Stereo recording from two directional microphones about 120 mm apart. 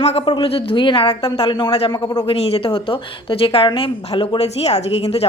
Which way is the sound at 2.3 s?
55° left (ahead or behind).